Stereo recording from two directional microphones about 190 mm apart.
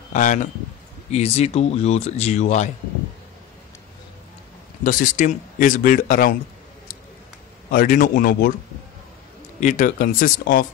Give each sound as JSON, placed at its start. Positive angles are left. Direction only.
{"t": 0.1, "sound": "speech", "side_deg": 40}
{"t": 4.8, "sound": "speech", "side_deg": 45}
{"t": 7.7, "sound": "speech", "side_deg": 45}
{"t": 9.6, "sound": "speech", "side_deg": 45}